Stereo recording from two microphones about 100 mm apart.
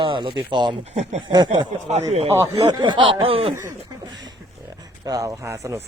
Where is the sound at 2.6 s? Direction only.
45° right (ahead or behind); by 3.5 s 65° right (ahead or behind).